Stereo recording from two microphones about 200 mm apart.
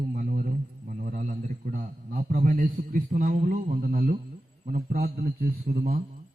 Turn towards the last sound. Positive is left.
turn(degrees=-50)  # may be behind; listen again after turning